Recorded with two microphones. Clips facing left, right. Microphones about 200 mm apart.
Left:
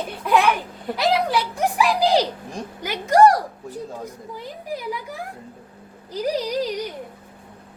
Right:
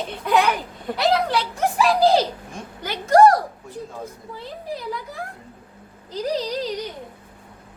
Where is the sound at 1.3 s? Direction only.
15° left (ahead or behind).